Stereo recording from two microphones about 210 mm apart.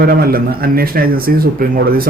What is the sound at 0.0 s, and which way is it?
A man's voice, 45° right (ahead or behind).